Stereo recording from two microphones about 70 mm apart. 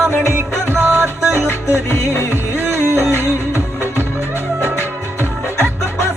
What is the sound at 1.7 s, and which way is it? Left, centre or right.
Music, left.